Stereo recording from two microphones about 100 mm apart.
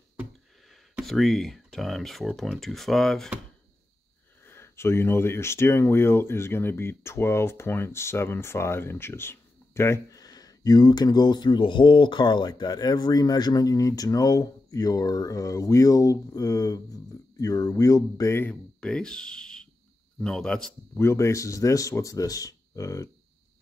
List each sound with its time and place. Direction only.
1.0 s speech: centre (ahead or behind)
4.5 s speech: 25° left (ahead or behind)
18.4 s a man's voice: 10° left (ahead or behind)
20.9 s speech: 25° left (ahead or behind)